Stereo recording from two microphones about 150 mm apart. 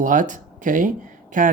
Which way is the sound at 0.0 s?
60° right (ahead or behind).